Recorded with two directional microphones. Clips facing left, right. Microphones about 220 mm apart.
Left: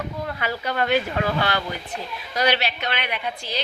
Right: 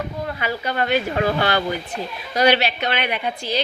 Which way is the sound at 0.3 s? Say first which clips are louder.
Right 1 dB; centre (ahead or behind).